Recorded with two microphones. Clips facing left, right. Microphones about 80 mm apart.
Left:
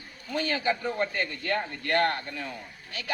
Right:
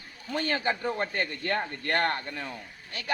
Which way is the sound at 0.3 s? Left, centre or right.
Right.